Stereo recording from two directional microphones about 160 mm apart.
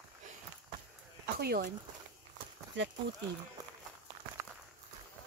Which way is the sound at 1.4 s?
75° right (ahead or behind).